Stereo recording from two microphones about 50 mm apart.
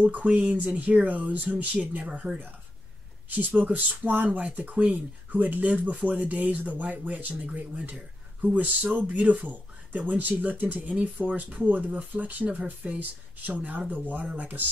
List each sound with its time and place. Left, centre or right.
0.0 s speech: right
12.8 s speech: right